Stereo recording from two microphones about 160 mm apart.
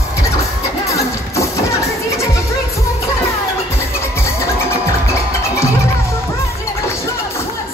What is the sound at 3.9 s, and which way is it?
Music, 15° left (ahead or behind).